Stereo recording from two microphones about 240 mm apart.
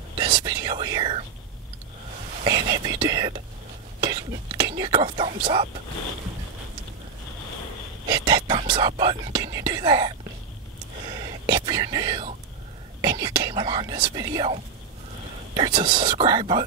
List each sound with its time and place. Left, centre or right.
0.2 s speech: centre
2.4 s speech: centre
8.1 s speech: centre
11.1 s whispering: centre
13.0 s speech: centre